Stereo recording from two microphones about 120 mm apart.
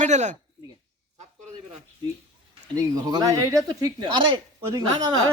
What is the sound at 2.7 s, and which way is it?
Speech, 30° right (ahead or behind).